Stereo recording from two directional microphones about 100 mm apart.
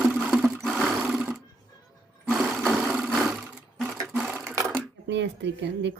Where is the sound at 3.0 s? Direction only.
Centre (ahead or behind).